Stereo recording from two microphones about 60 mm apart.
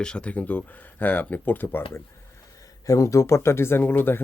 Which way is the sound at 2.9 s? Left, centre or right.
Left.